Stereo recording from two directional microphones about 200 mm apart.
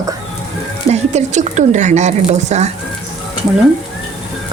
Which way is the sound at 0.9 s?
35° right (ahead or behind).